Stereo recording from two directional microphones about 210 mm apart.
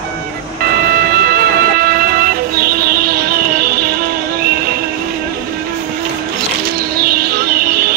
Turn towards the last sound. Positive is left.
turn(degrees=-45)  # may be behind; listen again after turning